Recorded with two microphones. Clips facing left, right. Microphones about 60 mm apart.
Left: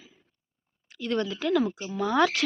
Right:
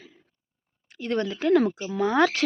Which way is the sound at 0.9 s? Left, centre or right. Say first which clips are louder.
Right 1 dB; right.